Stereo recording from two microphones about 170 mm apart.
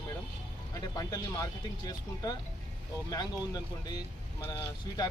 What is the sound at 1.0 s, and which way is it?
Speech, 20° left (ahead or behind).